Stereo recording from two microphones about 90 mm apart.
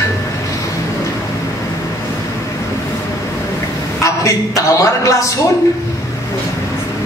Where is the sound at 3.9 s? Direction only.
35° left (ahead or behind).